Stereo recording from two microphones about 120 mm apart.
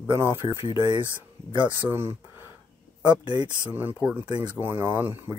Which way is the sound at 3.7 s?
15° right (ahead or behind).